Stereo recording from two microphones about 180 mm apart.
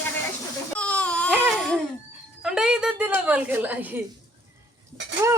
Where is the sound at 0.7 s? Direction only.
5° left (ahead or behind).